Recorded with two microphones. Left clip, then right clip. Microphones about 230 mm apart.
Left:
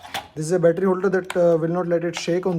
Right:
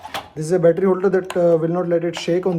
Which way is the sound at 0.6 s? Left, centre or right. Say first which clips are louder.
Right 3 dB; centre.